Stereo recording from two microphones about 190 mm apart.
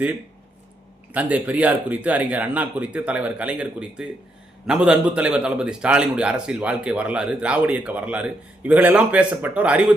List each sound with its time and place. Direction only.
1.1 s a man's voice: 10° right (ahead or behind)